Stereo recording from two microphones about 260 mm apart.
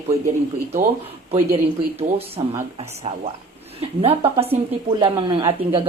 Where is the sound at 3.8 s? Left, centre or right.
Right.